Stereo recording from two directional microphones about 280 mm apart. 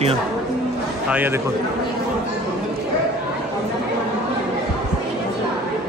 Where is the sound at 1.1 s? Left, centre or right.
Centre.